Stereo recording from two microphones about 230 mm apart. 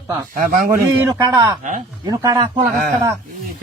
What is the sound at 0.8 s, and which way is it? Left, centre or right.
A man's voice, centre.